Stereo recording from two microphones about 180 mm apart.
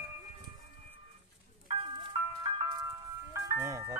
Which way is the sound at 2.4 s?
30° right (ahead or behind).